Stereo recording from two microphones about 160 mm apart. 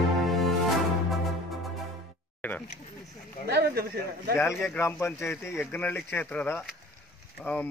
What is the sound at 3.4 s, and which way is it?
Speech, 90° right.